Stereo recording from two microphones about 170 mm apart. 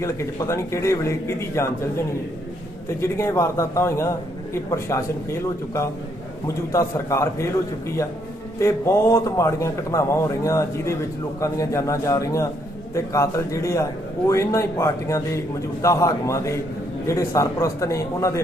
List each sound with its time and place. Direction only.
0.0 s a man's voice: 15° left (ahead or behind)
3.0 s a man's voice: 15° left (ahead or behind)